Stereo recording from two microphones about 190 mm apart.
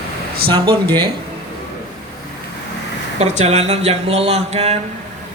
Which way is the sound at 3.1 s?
35° right (ahead or behind).